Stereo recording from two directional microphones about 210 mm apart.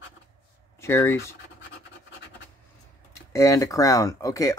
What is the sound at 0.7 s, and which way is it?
Speech, 10° left (ahead or behind).